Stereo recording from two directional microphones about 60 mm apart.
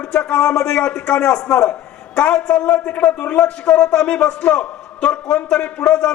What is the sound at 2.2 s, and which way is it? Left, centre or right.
A man's voice, centre.